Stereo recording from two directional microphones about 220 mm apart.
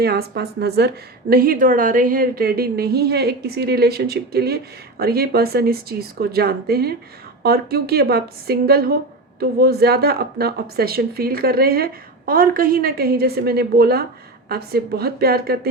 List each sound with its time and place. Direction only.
0.0 s a woman's voice: 45° right (ahead or behind)